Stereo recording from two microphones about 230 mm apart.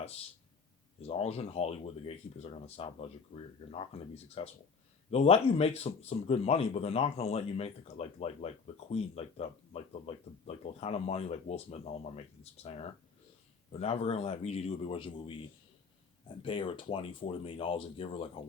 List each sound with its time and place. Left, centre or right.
1.0 s speech: left
16.4 s speech: left